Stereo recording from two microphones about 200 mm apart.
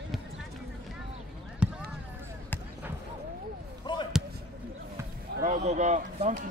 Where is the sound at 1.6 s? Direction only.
5° right (ahead or behind).